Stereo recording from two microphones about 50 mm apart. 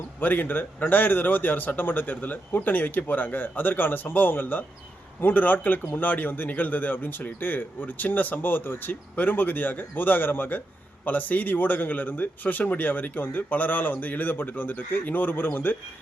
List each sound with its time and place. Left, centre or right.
0.2 s a man's voice: left